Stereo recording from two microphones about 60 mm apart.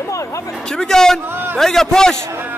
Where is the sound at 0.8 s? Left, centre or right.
Centre.